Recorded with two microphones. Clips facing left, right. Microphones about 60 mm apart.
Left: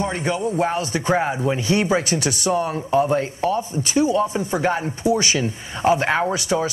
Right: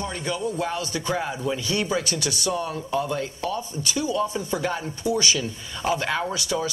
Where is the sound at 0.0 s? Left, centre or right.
Left.